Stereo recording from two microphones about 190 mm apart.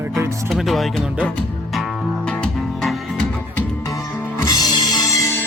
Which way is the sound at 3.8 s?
15° left (ahead or behind).